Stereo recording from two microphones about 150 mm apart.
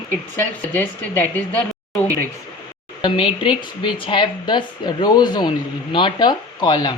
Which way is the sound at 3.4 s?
35° left (ahead or behind).